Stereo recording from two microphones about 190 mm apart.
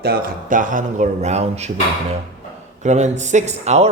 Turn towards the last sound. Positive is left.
turn(degrees=-35)  # may be behind; listen again after turning